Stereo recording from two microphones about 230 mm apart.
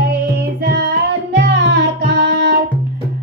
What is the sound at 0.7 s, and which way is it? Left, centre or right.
Music, right.